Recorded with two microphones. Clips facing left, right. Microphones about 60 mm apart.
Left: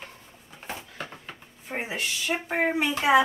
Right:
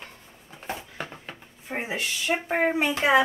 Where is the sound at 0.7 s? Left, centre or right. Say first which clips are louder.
Right 3 dB; right.